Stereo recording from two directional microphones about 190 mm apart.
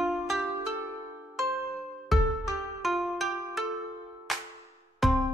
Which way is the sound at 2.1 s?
Centre (ahead or behind).